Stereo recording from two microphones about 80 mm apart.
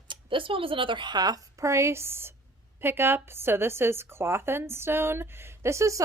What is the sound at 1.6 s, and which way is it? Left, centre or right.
A woman's voice, right.